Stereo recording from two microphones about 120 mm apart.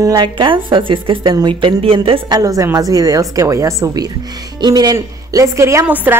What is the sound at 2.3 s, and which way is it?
A woman's voice, 30° right (ahead or behind).